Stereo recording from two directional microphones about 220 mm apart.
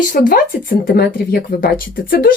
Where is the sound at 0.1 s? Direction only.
40° left (ahead or behind).